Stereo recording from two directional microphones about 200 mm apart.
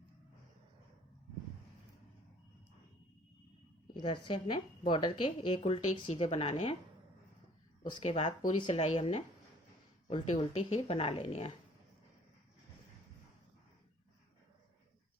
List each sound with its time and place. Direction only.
3.9 s speech: 25° left (ahead or behind)
7.9 s speech: 30° left (ahead or behind)